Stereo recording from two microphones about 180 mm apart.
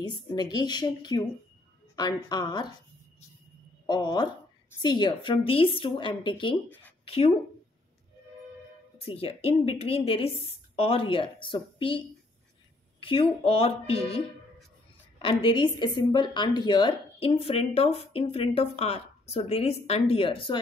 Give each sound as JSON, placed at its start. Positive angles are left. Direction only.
{"t": 0.0, "sound": "a woman's voice", "side_deg": 25}
{"t": 3.8, "sound": "a woman's voice", "side_deg": 25}
{"t": 8.9, "sound": "a woman's voice", "side_deg": 30}
{"t": 13.0, "sound": "a woman's voice", "side_deg": 30}
{"t": 15.2, "sound": "a woman's voice", "side_deg": 30}